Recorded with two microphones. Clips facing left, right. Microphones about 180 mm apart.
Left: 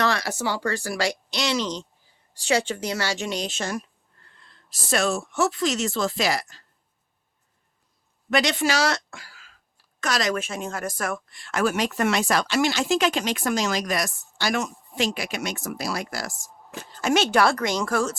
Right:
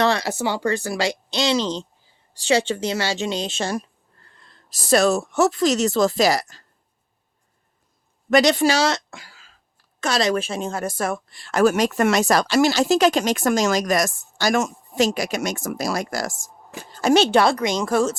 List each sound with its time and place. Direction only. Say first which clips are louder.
0.0 s speech: right 4 dB; 25° right (ahead or behind)
4.4 s speech: right 1 dB; 40° right (ahead or behind)
8.3 s a woman's voice: right 6 dB; 40° right (ahead or behind); by 18.2 s 25° right (ahead or behind)